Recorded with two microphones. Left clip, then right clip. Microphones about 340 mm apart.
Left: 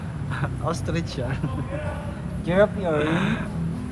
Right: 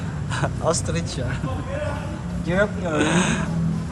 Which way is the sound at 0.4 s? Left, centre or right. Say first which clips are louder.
Right 6 dB; centre.